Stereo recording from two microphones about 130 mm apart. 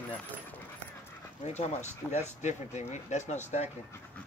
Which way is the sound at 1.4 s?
60° left (ahead or behind).